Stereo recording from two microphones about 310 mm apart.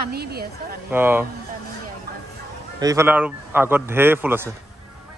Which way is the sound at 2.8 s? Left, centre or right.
Centre.